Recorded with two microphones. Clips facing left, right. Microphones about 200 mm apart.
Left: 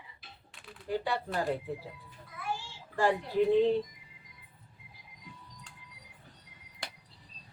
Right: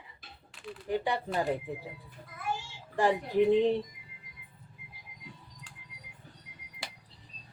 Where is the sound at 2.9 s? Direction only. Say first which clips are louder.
Right 1 dB; 15° right (ahead or behind).